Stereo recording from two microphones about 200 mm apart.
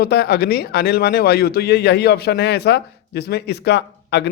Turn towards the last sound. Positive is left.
turn(degrees=55)  # may be behind; listen again after turning